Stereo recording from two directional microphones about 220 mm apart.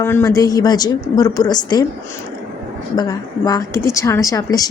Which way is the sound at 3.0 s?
15° left (ahead or behind).